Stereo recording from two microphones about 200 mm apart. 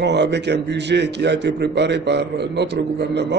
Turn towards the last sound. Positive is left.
turn(degrees=-60)  # may be behind; listen again after turning